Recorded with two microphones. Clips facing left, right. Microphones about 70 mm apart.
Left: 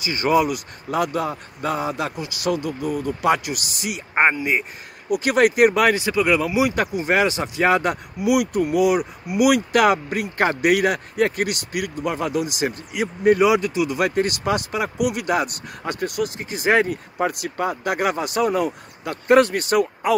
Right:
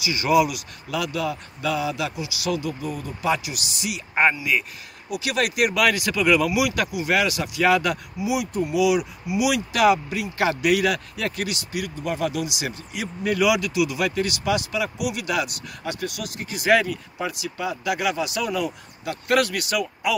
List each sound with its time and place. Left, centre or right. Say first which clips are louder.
0.0 s speech: left 1 dB; left
6.5 s speech: left 3 dB; left
8.2 s speech: left 7 dB; left
13.2 s speech: left 5 dB; left